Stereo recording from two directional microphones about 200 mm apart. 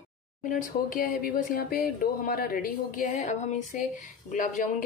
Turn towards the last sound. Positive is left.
turn(degrees=40)  # may be behind; listen again after turning